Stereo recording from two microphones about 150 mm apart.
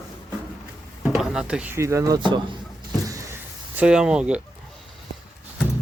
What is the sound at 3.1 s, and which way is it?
Vehicle, 20° right (ahead or behind).